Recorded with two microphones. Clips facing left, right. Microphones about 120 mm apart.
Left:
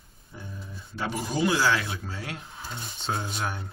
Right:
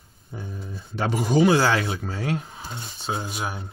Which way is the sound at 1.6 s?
55° right (ahead or behind).